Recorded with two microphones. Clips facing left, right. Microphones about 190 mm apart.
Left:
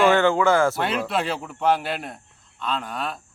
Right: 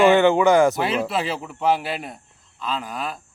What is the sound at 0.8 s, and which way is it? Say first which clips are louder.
Speech: right 1 dB; 5° right (ahead or behind).